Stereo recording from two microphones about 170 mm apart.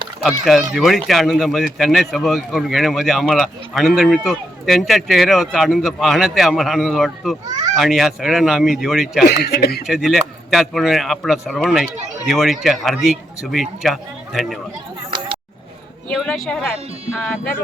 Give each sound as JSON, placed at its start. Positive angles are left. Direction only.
{"t": 0.2, "sound": "speech", "side_deg": 0}
{"t": 9.2, "sound": "speech", "side_deg": 75}
{"t": 9.8, "sound": "speech", "side_deg": 0}
{"t": 16.0, "sound": "speech", "side_deg": 0}